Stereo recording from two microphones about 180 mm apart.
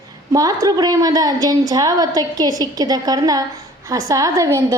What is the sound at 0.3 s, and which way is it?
A woman's voice, 20° right (ahead or behind).